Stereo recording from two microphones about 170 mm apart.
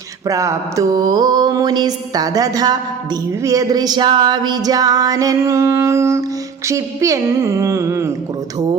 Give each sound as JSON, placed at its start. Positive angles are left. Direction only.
{"t": 0.3, "sound": "mantra", "side_deg": -20}
{"t": 6.7, "sound": "a woman's voice", "side_deg": -20}